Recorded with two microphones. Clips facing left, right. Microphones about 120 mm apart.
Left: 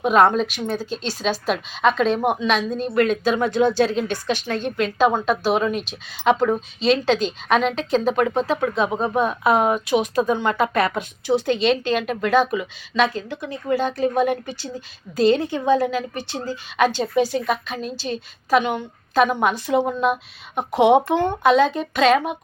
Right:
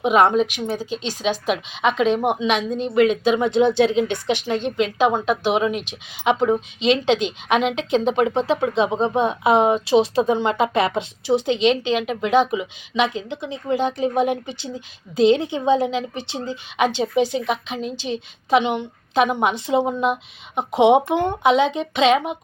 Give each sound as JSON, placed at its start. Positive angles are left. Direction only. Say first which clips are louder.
{"t": 0.0, "sound": "a woman's voice", "louder": "even", "side_deg": -15}